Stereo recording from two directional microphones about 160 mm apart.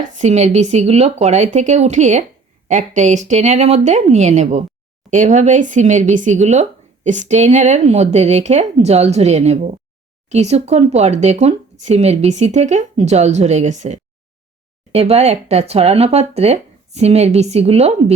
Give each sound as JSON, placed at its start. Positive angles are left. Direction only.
{"t": 0.2, "sound": "speech", "side_deg": -45}